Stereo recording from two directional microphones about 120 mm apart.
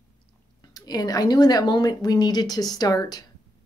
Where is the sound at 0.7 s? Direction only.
35° left (ahead or behind).